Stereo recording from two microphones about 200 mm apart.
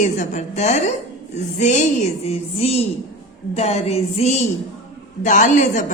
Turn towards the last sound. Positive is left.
turn(degrees=40)  # may be behind; listen again after turning